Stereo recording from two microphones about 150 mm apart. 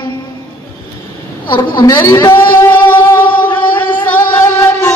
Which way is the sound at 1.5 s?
25° left (ahead or behind).